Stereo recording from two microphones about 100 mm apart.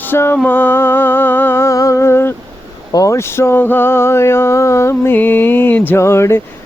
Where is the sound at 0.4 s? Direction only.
20° left (ahead or behind).